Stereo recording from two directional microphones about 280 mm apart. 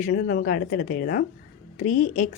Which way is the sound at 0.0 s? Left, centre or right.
Left.